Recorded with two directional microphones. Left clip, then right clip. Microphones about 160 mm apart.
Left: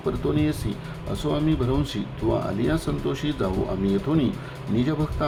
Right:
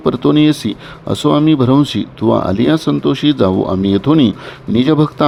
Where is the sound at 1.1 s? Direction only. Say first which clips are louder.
Right 13 dB; 90° right.